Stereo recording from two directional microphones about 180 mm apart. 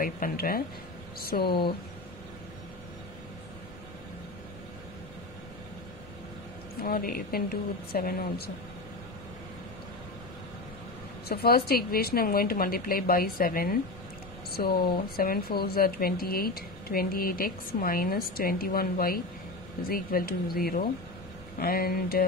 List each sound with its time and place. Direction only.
0.0 s speech: 55° left (ahead or behind)
6.8 s speech: 55° left (ahead or behind)
11.2 s speech: 60° left (ahead or behind)